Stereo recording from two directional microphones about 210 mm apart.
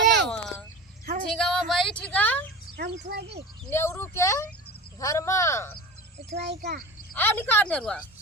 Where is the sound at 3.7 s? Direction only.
10° left (ahead or behind).